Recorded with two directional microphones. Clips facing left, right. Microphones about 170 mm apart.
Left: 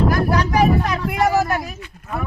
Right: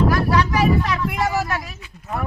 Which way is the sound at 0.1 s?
45° left (ahead or behind).